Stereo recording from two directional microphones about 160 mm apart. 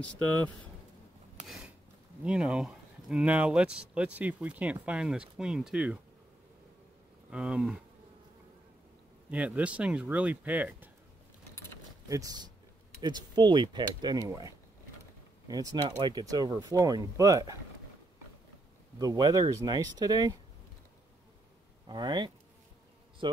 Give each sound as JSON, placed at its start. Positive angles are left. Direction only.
{"t": 2.2, "sound": "speech", "side_deg": -5}
{"t": 7.2, "sound": "speech", "side_deg": -5}
{"t": 9.3, "sound": "speech", "side_deg": -10}
{"t": 12.1, "sound": "speech", "side_deg": -20}
{"t": 18.9, "sound": "speech", "side_deg": -25}
{"t": 21.8, "sound": "speech", "side_deg": -25}